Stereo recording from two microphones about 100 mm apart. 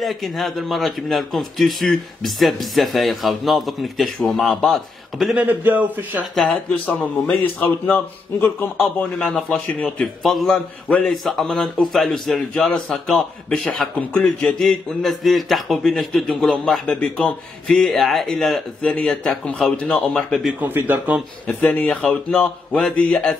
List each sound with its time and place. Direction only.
0.0 s a man's voice: centre (ahead or behind)
5.3 s a man's voice: 15° right (ahead or behind)
6.3 s a man's voice: 5° left (ahead or behind)
7.9 s speech: 15° left (ahead or behind)
8.7 s a man's voice: centre (ahead or behind)
20.6 s a man's voice: 20° right (ahead or behind)
21.5 s speech: 15° left (ahead or behind)